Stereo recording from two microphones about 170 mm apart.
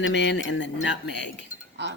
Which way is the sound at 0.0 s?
90° left.